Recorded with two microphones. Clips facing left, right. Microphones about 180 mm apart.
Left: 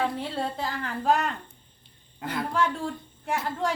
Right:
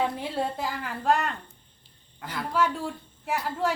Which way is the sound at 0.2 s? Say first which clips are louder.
Right 1 dB; 10° right (ahead or behind).